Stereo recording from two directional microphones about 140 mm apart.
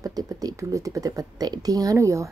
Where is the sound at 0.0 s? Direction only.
25° right (ahead or behind).